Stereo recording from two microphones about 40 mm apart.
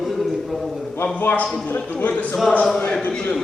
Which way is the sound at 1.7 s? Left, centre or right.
Left.